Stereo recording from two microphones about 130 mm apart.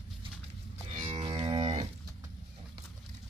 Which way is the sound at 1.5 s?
55° right (ahead or behind).